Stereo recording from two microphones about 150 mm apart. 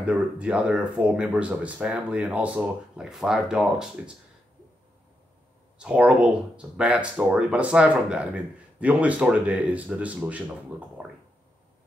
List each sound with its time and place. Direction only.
0.0 s speech: 5° right (ahead or behind)
5.8 s speech: 5° right (ahead or behind)
11.0 s a sound: 10° right (ahead or behind)